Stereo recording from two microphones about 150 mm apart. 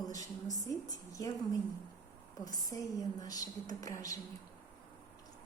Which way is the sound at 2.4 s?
25° left (ahead or behind).